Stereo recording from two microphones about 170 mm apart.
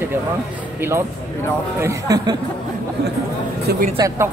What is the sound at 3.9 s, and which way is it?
Speech, 20° right (ahead or behind).